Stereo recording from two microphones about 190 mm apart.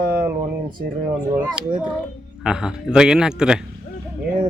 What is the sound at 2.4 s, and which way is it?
Speech, 5° right (ahead or behind).